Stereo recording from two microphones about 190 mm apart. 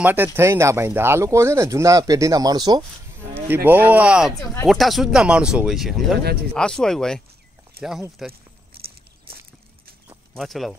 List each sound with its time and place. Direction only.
0.0 s speech: 10° right (ahead or behind)
7.8 s speech: 55° right (ahead or behind)
8.2 s speech: centre (ahead or behind)
9.3 s a sound: 55° right (ahead or behind)
10.3 s speech: centre (ahead or behind)